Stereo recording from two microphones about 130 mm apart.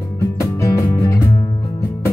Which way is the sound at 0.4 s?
25° left (ahead or behind).